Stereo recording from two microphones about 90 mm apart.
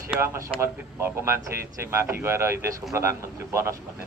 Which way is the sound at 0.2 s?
35° right (ahead or behind).